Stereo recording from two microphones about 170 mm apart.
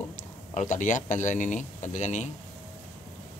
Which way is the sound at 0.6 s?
45° left (ahead or behind).